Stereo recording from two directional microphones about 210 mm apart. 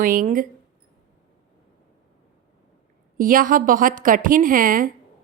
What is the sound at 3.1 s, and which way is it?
A woman's voice, 40° right (ahead or behind).